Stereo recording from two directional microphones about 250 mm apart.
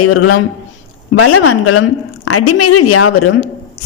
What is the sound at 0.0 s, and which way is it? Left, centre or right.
A woman's voice, left.